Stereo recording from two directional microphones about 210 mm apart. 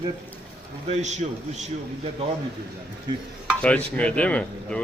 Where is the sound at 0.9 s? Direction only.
35° right (ahead or behind).